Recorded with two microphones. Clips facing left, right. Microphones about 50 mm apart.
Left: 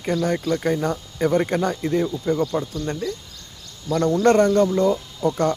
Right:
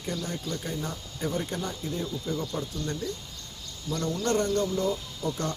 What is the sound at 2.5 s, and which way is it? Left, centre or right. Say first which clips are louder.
Speech: left 7 dB; left.